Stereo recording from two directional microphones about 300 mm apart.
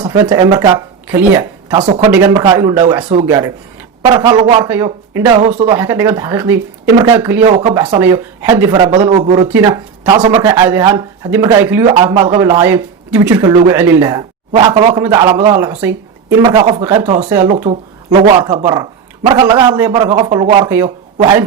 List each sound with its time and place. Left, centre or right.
0.0 s speech: centre
5.7 s speech: centre
17.6 s speech: right